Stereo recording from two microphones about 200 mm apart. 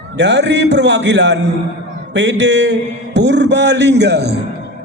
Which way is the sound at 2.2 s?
65° right (ahead or behind).